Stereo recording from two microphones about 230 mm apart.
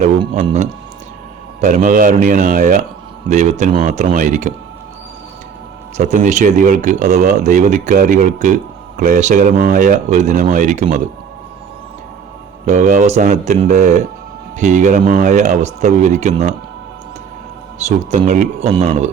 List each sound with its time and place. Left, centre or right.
0.0 s speech: right
6.0 s speech: right
12.6 s speech: right
17.7 s speech: right